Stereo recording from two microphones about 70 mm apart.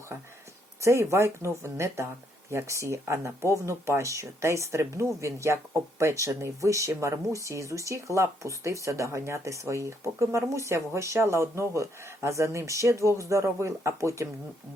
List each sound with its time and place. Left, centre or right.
0.8 s speech: right